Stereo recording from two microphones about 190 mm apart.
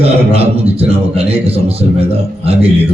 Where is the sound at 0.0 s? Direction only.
30° right (ahead or behind).